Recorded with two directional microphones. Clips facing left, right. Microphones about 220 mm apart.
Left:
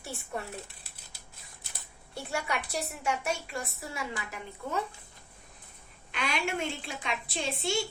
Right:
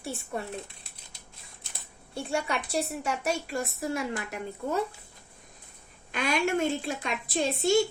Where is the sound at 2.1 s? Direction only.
30° right (ahead or behind).